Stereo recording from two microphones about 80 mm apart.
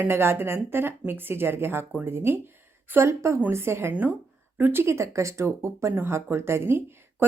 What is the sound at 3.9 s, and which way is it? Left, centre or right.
Speech, centre.